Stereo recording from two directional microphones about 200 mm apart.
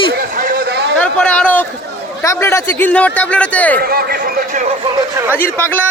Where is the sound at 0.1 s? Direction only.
45° right (ahead or behind).